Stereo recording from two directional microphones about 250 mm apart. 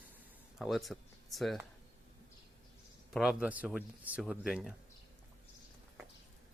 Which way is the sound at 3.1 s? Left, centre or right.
Centre.